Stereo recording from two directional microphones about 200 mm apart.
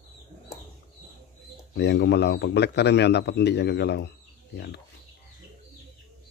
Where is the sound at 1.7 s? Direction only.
60° left (ahead or behind).